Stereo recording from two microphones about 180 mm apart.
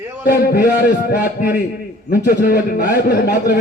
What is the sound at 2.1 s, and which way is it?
A man's voice, 60° left (ahead or behind).